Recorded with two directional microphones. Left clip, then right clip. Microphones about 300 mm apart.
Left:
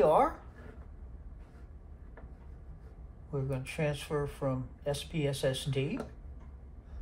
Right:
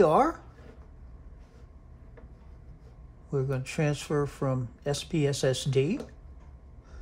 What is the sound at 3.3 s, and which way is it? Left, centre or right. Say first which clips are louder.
Speech: right 6 dB; right.